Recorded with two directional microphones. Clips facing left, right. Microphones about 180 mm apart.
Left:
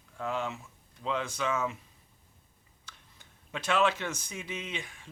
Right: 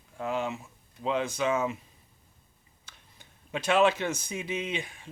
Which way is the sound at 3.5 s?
15° right (ahead or behind).